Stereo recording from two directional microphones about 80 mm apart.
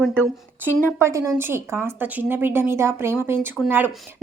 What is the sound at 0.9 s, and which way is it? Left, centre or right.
A woman's voice, right.